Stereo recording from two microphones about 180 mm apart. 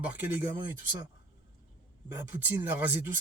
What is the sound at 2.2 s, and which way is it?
Speech, 10° right (ahead or behind).